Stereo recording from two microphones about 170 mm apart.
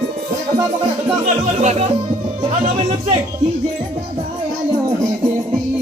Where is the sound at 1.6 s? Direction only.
45° right (ahead or behind).